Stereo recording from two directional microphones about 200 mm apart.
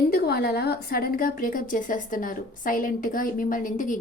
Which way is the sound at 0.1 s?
50° left (ahead or behind).